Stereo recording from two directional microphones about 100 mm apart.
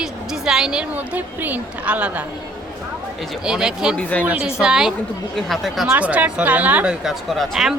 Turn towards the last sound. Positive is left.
turn(degrees=0)  # may be behind; listen again after turning